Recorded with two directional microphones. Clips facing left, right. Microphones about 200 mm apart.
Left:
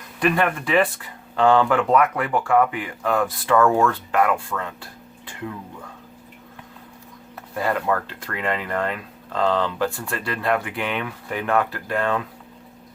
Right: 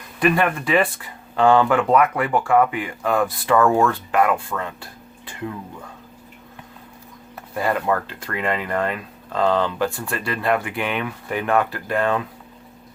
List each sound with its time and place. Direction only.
0.2 s speech: 10° right (ahead or behind)
7.5 s speech: 15° right (ahead or behind)